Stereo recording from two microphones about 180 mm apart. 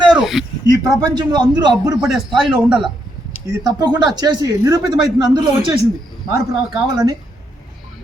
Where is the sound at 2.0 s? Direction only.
Centre (ahead or behind).